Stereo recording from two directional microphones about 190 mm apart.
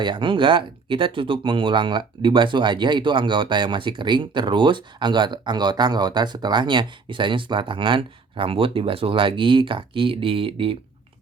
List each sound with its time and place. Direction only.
0.0 s speech: 25° right (ahead or behind)